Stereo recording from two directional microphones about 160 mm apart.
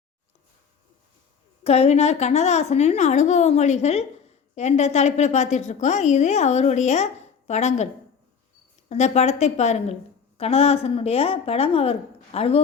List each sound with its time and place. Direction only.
1.6 s a woman's voice: 40° left (ahead or behind)
8.9 s a woman's voice: 45° left (ahead or behind)